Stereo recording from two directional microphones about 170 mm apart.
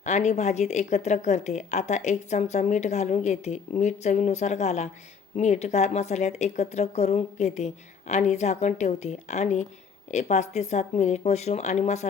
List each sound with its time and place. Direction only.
0.0 s a woman's voice: 45° left (ahead or behind)